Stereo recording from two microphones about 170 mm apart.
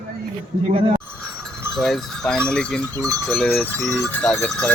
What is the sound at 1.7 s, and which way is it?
Speech, centre (ahead or behind).